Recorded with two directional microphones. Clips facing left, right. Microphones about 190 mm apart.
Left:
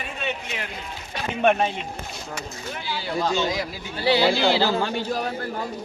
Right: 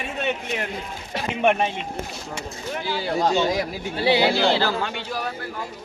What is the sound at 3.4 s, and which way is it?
Speech, 60° right (ahead or behind).